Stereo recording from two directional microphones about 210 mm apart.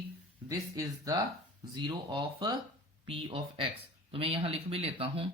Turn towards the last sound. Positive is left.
turn(degrees=-25)  # may be behind; listen again after turning